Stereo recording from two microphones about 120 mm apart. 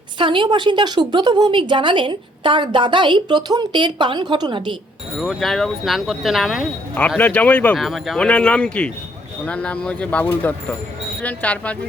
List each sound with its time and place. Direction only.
0.2 s a woman's voice: 40° right (ahead or behind)
5.1 s speech: centre (ahead or behind)
7.2 s speech: 10° left (ahead or behind)
7.8 s speech: centre (ahead or behind)